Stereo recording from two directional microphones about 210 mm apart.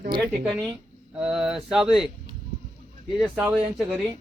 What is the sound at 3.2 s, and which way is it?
Speech, 5° right (ahead or behind).